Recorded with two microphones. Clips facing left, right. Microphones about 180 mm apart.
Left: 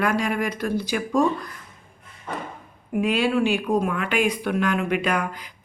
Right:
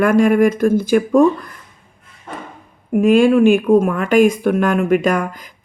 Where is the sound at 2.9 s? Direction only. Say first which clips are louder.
Right 10 dB; 45° right (ahead or behind).